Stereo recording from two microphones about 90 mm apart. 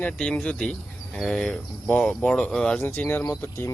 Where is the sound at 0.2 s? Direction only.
10° left (ahead or behind).